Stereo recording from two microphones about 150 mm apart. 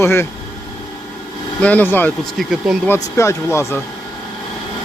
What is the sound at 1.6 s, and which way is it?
Speech, 10° left (ahead or behind).